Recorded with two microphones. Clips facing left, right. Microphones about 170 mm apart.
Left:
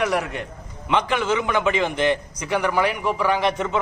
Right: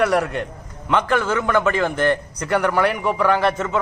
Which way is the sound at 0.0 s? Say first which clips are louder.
Right 4 dB; 10° left (ahead or behind).